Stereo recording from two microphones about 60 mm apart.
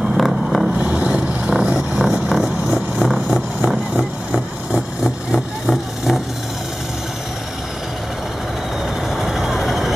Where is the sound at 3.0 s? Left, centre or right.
Centre.